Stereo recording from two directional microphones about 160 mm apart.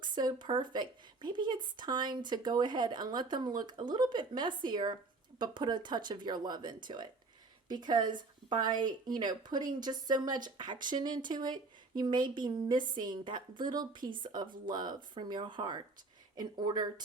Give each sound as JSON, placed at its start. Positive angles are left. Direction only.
{"t": 0.2, "sound": "speech", "side_deg": -25}